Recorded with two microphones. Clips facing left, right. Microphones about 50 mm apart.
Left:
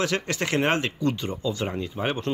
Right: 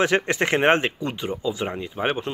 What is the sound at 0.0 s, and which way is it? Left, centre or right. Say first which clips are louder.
Speech: right 5 dB; right.